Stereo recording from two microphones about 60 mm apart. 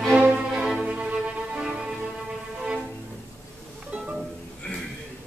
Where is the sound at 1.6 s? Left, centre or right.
Centre.